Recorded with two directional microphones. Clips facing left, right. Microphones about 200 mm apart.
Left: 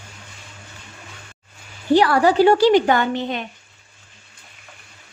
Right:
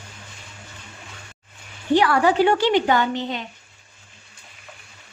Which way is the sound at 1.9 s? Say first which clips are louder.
Left 3 dB; 35° left (ahead or behind).